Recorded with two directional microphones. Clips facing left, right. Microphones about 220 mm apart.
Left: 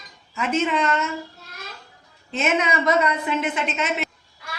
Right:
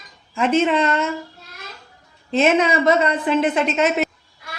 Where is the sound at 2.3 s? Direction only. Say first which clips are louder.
Right 6 dB; 35° right (ahead or behind).